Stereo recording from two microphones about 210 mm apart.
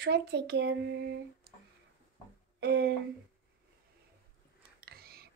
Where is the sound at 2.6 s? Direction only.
50° right (ahead or behind).